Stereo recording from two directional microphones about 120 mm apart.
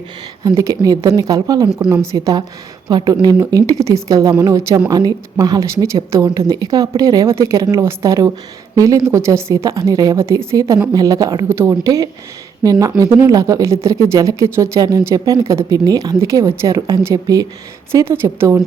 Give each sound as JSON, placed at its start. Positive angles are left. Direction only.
{"t": 0.4, "sound": "speech", "side_deg": -30}